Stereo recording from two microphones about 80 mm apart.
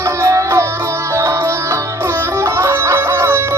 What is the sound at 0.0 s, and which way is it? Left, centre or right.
Music, right.